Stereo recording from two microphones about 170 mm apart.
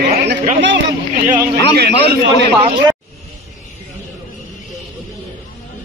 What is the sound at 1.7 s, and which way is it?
Speech, 70° right (ahead or behind).